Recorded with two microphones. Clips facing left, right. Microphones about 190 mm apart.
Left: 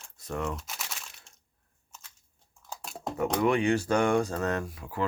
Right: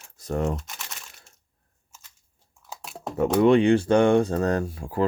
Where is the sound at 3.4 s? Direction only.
30° right (ahead or behind).